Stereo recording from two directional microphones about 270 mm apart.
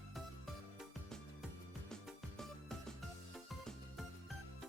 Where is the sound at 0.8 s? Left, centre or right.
Centre.